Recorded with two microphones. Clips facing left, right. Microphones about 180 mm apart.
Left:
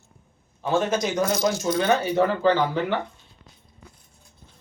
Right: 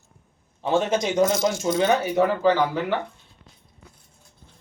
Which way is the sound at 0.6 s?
25° right (ahead or behind).